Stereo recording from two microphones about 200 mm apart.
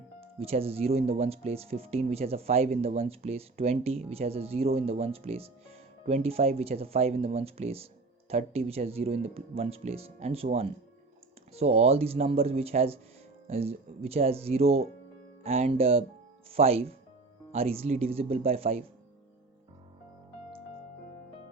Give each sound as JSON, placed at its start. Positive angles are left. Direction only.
{"t": 0.3, "sound": "speech", "side_deg": -30}